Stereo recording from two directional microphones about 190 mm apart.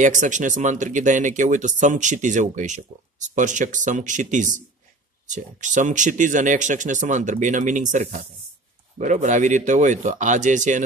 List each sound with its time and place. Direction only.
0.0 s speech: 40° right (ahead or behind)